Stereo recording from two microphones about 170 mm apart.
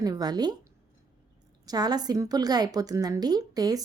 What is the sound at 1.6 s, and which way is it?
A woman's voice, 25° right (ahead or behind).